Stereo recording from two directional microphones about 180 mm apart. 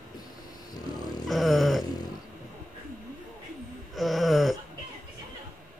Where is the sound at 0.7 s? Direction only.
20° left (ahead or behind).